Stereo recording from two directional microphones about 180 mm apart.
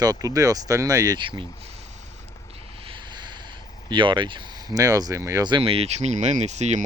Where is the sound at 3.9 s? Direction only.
25° right (ahead or behind).